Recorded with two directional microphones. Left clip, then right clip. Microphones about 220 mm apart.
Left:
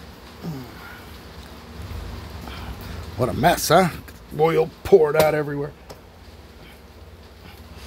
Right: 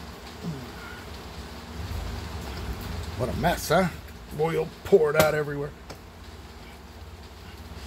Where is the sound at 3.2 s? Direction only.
45° left (ahead or behind).